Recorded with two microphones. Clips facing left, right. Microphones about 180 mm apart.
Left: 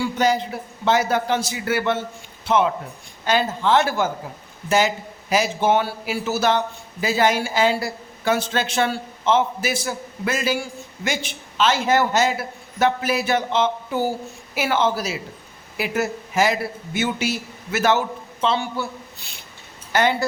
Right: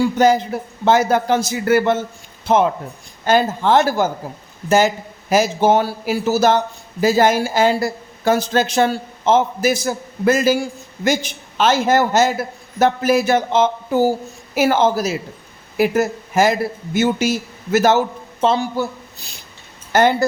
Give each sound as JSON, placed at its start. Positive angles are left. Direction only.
{"t": 0.0, "sound": "a woman's voice", "side_deg": -45}
{"t": 5.3, "sound": "a man's voice", "side_deg": -40}